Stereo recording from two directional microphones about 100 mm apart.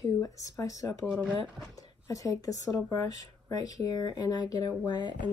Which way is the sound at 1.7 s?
35° left (ahead or behind).